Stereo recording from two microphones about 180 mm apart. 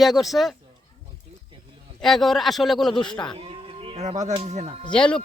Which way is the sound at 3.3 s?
30° right (ahead or behind).